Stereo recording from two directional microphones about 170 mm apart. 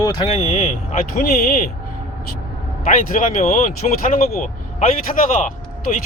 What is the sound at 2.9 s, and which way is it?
Speech, 50° left (ahead or behind).